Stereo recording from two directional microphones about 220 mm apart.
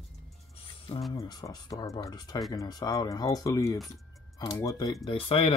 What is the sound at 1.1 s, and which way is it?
Speech, 15° left (ahead or behind).